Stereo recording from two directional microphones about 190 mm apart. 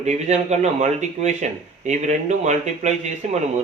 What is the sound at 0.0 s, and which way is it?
A man's voice, 35° right (ahead or behind).